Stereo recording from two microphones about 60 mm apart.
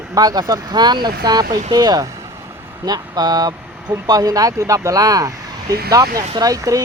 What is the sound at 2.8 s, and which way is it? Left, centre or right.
Speech, right.